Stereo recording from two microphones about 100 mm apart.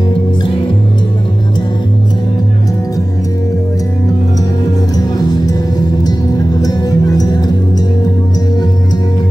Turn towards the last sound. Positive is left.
turn(degrees=40)  # may be behind; listen again after turning